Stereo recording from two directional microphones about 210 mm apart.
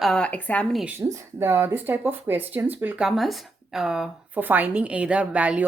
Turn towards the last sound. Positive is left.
turn(degrees=-5)  # may be behind; listen again after turning